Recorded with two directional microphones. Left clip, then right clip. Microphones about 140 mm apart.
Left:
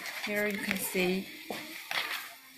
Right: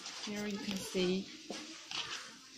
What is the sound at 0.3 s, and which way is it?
Speech, 30° left (ahead or behind).